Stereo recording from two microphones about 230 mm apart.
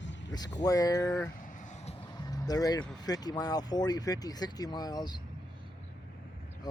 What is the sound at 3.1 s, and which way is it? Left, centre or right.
Speech, centre.